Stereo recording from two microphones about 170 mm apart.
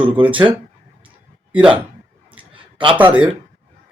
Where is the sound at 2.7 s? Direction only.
30° right (ahead or behind).